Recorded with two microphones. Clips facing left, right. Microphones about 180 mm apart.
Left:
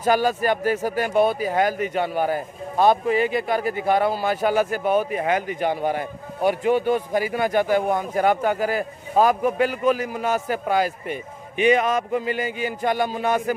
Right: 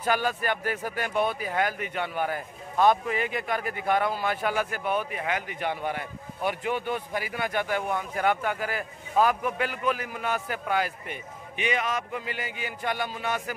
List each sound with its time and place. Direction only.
0.0 s speech: 35° left (ahead or behind)